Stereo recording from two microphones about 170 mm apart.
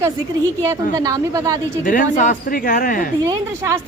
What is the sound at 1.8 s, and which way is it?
Speech, 50° left (ahead or behind).